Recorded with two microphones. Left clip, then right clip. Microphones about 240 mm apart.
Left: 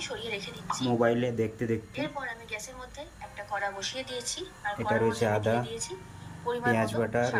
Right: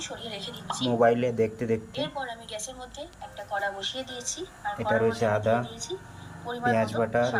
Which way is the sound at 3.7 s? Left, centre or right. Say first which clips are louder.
Right 2 dB; left.